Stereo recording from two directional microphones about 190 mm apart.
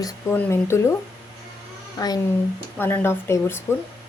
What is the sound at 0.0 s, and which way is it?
Speech, 10° left (ahead or behind).